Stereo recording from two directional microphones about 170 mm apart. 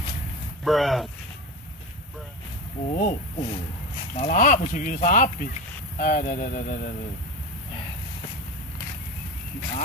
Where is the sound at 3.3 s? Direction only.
35° left (ahead or behind).